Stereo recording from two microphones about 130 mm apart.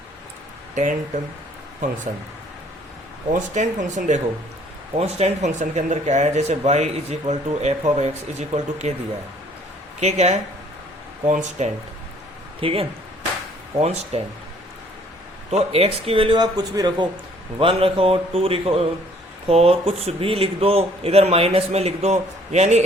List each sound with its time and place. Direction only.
0.8 s speech: 70° right (ahead or behind)
3.3 s speech: 70° right (ahead or behind)
4.9 s speech: 55° right (ahead or behind)
10.0 s speech: 55° right (ahead or behind)
11.3 s speech: 70° right (ahead or behind)
12.5 s speech: 45° right (ahead or behind)
15.4 s speech: 55° right (ahead or behind); by 17.1 s 30° right (ahead or behind)
17.6 s speech: 45° right (ahead or behind)